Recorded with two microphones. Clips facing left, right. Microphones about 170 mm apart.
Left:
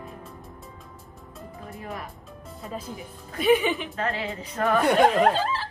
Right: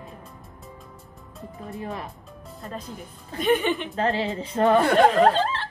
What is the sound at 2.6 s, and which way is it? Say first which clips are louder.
A woman's voice: left 1 dB; 5° left (ahead or behind).